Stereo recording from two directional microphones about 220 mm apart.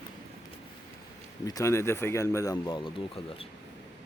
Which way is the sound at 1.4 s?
15° left (ahead or behind).